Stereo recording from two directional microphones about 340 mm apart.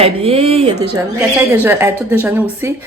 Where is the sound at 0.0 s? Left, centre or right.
Centre.